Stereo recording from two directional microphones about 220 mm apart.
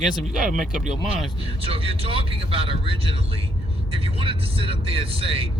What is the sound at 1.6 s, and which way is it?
Speech, 25° right (ahead or behind).